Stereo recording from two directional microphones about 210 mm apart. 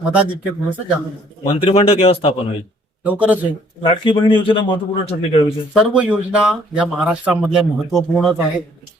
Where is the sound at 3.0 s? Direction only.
5° right (ahead or behind).